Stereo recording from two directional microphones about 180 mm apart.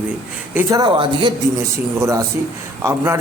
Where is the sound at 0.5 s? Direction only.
20° right (ahead or behind).